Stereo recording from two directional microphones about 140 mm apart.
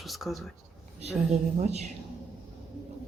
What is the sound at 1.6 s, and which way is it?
Speech, 50° right (ahead or behind).